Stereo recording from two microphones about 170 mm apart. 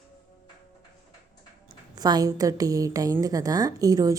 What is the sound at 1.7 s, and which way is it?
A woman's voice, 25° right (ahead or behind).